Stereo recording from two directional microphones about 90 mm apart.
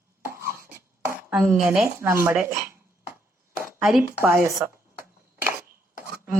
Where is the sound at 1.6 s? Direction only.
25° right (ahead or behind).